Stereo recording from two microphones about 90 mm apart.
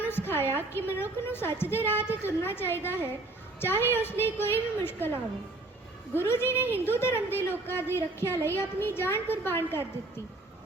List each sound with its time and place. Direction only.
0.0 s a woman's voice: 25° left (ahead or behind)
6.1 s a woman's voice: 25° left (ahead or behind)